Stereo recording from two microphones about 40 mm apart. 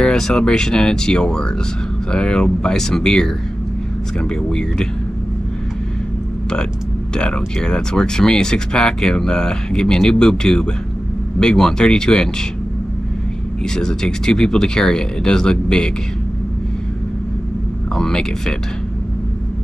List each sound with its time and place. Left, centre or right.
0.0 s speech: centre
4.3 s speech: centre
7.2 s speech: centre
13.7 s speech: centre
17.9 s speech: centre